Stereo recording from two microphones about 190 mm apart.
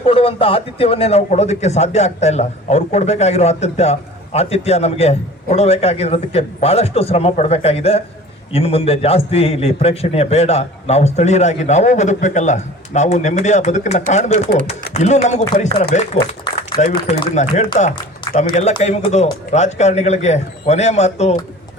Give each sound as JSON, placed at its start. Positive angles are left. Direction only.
{"t": 0.0, "sound": "speech", "side_deg": 30}
{"t": 17.1, "sound": "speech", "side_deg": 35}